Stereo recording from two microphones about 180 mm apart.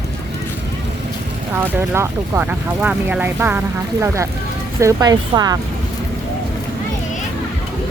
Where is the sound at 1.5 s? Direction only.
15° right (ahead or behind).